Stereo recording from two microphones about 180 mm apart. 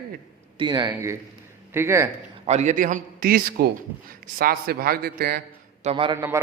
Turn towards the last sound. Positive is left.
turn(degrees=-30)  # may be behind; listen again after turning